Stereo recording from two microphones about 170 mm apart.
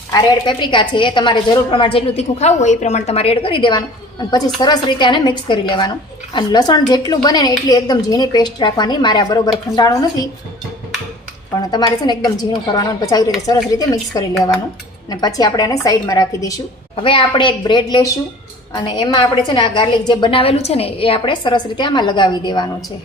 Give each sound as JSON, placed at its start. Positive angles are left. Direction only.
{"t": 0.1, "sound": "a woman's voice", "side_deg": 25}
{"t": 11.7, "sound": "a woman's voice", "side_deg": 25}
{"t": 16.9, "sound": "a woman's voice", "side_deg": 30}